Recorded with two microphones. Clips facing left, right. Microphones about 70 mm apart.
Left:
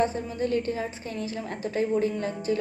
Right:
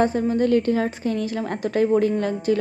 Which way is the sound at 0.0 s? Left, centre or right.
Right.